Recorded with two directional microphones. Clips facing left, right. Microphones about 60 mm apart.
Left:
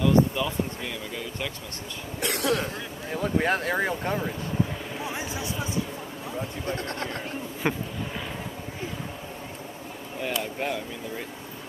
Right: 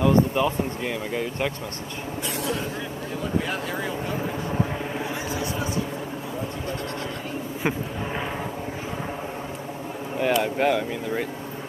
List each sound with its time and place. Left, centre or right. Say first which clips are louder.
0.0 s speech: right 2 dB; right
2.2 s speech: left 4 dB; left
3.2 s speech: left 3 dB; left
4.6 s vehicle: right 1 dB; right
5.3 s a sound: right 4 dB; right
7.6 s speech: right 1 dB; centre
10.2 s speech: right 8 dB; right